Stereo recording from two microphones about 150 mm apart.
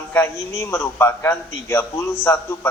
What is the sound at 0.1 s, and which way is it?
A man's voice, 15° left (ahead or behind).